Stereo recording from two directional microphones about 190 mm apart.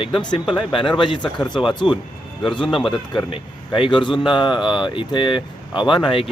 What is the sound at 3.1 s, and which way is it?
Speech, 25° left (ahead or behind).